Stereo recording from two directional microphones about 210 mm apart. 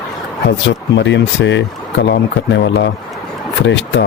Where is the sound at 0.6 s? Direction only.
60° left (ahead or behind).